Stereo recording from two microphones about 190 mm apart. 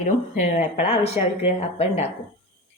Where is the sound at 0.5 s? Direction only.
35° left (ahead or behind).